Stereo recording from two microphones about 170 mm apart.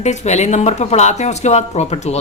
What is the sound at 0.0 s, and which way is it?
A woman's voice, 40° left (ahead or behind).